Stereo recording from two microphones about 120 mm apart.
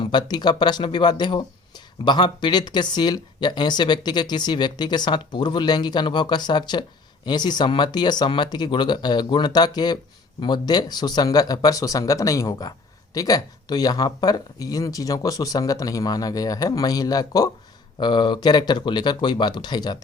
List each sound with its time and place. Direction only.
0.0 s speech: 40° left (ahead or behind)